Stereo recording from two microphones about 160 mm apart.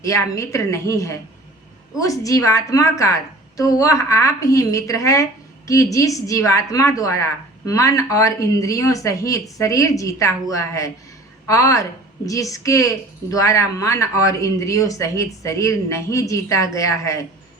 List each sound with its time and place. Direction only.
0.0 s a woman's voice: 20° left (ahead or behind)